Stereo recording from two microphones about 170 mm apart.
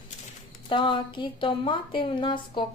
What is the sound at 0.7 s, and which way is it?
A woman's voice, 30° left (ahead or behind).